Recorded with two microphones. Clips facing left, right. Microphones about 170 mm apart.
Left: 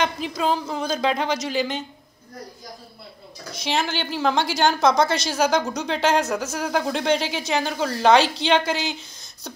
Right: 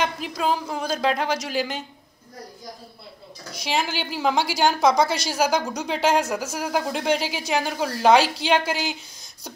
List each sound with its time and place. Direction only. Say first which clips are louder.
0.0 s speech: left 1 dB; 5° right (ahead or behind)
3.6 s a woman's voice: left 1 dB; 5° right (ahead or behind)